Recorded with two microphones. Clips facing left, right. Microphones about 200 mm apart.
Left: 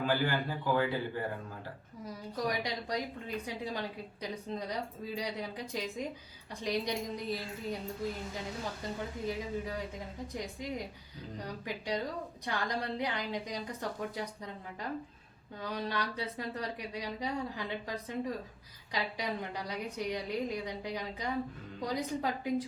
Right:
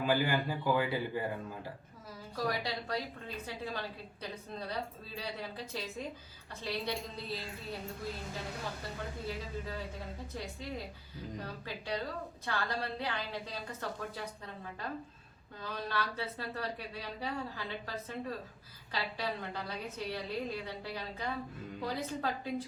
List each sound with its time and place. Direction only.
0.0 s speech: 10° right (ahead or behind)
2.0 s a woman's voice: 20° left (ahead or behind)
9.2 s a woman's voice: 15° left (ahead or behind)